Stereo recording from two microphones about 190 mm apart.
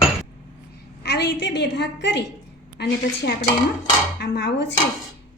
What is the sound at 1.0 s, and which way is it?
A woman's voice, 60° left (ahead or behind).